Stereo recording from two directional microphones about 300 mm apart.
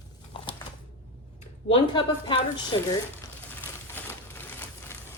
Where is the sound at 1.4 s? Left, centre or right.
Centre.